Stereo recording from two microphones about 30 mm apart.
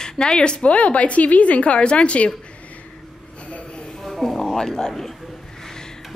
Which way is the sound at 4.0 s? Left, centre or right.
Centre.